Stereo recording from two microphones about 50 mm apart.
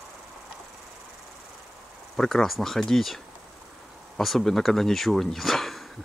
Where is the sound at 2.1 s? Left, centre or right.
Centre.